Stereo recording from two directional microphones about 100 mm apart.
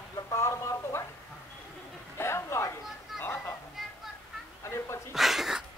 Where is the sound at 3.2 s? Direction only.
20° left (ahead or behind).